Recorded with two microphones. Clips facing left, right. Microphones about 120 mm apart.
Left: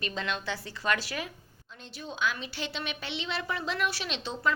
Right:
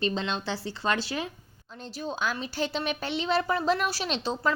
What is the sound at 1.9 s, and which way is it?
A woman's voice, 40° right (ahead or behind).